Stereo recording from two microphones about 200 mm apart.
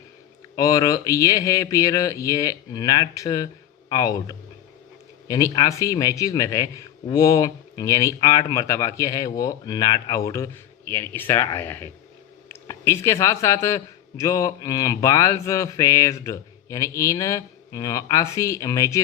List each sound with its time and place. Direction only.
0.5 s a man's voice: 15° left (ahead or behind)